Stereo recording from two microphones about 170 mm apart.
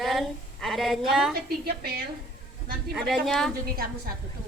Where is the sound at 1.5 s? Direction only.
65° right (ahead or behind).